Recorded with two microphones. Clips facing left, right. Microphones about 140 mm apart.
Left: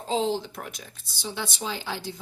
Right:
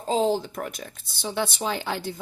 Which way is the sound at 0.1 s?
45° right (ahead or behind).